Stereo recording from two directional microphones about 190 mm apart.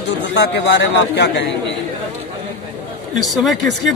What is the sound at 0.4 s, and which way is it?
A man's voice, 60° left (ahead or behind).